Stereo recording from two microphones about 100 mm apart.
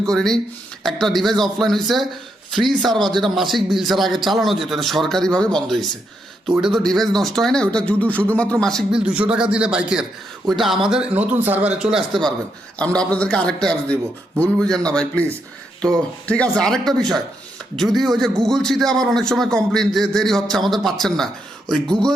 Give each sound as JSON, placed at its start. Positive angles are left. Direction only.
{"t": 0.1, "sound": "a man's voice", "side_deg": 5}
{"t": 8.9, "sound": "a man's voice", "side_deg": -10}
{"t": 11.1, "sound": "a man's voice", "side_deg": -15}
{"t": 12.8, "sound": "a man's voice", "side_deg": 10}